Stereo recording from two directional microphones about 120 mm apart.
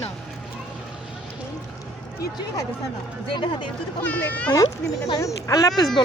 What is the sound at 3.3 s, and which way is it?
Speech, 40° left (ahead or behind).